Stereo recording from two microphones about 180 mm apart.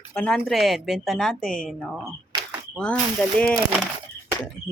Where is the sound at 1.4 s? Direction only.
50° left (ahead or behind).